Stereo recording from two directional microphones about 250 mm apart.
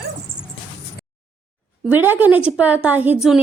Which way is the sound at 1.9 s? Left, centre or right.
Centre.